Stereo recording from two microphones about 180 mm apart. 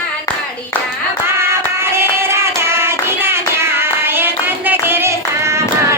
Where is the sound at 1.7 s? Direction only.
15° right (ahead or behind).